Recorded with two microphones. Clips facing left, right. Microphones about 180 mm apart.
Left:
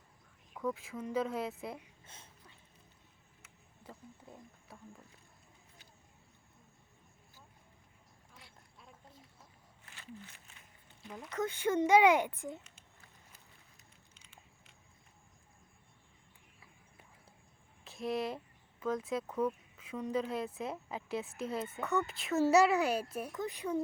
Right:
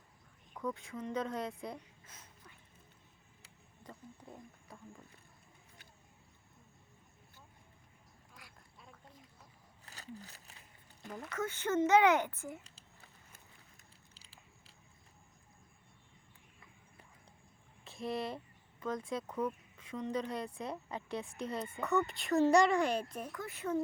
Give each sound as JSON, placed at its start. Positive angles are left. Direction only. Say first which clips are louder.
{"t": 0.5, "sound": "speech", "louder": "left 2 dB", "side_deg": 5}
{"t": 2.0, "sound": "a sound", "louder": "left 1 dB", "side_deg": 25}
{"t": 4.7, "sound": "speech", "louder": "even", "side_deg": 0}
{"t": 8.4, "sound": "duck", "louder": "even", "side_deg": 25}
{"t": 9.8, "sound": "a sound", "louder": "right 1 dB", "side_deg": -40}
{"t": 11.3, "sound": "a child's voice", "louder": "left 2 dB", "side_deg": 15}
{"t": 14.1, "sound": "biting", "louder": "even", "side_deg": -35}
{"t": 17.8, "sound": "speech", "louder": "left 2 dB", "side_deg": 0}
{"t": 23.3, "sound": "a child's voice", "louder": "left 1 dB", "side_deg": 20}